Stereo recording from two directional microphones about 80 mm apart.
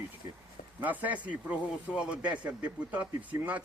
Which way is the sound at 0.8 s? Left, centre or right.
Right.